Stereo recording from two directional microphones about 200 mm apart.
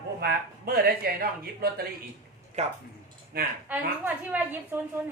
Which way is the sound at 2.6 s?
35° right (ahead or behind).